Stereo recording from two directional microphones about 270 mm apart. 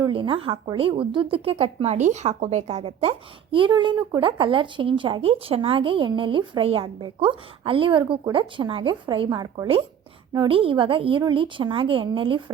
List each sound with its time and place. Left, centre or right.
0.0 s a woman's voice: centre